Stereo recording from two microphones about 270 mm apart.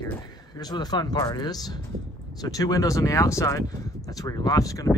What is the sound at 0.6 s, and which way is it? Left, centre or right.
Speech, centre.